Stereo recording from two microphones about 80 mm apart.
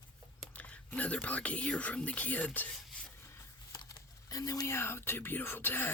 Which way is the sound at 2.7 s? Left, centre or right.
Centre.